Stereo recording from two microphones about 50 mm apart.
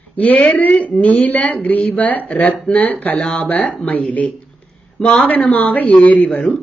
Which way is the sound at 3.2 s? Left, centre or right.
Left.